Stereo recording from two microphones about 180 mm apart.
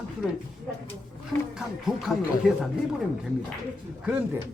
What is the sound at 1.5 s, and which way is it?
Speech, centre (ahead or behind).